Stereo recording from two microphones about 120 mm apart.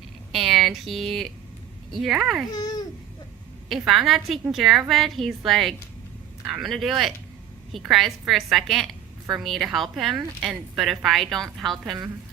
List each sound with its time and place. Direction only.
0.3 s a woman's voice: centre (ahead or behind)
2.5 s speech: 35° left (ahead or behind)
3.7 s a woman's voice: centre (ahead or behind)